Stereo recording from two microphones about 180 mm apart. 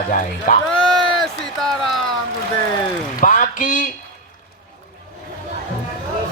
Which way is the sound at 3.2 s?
45° left (ahead or behind).